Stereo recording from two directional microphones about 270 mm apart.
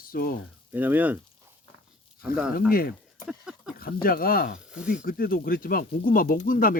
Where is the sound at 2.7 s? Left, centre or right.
Left.